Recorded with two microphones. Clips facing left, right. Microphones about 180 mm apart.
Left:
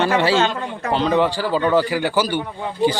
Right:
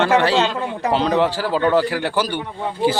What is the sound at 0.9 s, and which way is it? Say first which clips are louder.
A man's voice: even; centre (ahead or behind).